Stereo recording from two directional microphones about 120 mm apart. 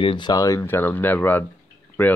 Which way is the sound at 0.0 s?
40° left (ahead or behind).